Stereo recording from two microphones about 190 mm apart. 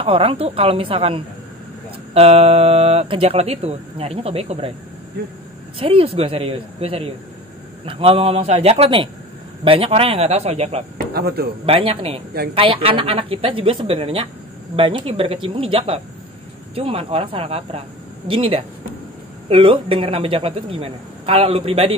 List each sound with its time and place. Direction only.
0.0 s a man's voice: 30° right (ahead or behind)
5.8 s speech: 30° right (ahead or behind)
11.1 s speech: 55° right (ahead or behind)
11.6 s a man's voice: 30° right (ahead or behind)